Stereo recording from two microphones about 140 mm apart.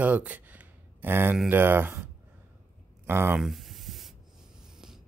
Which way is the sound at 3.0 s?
15° right (ahead or behind).